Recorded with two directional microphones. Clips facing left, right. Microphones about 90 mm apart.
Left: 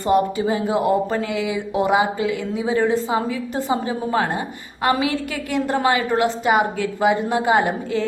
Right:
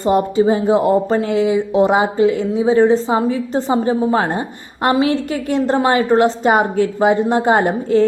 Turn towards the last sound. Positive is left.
turn(degrees=-40)  # may be behind; listen again after turning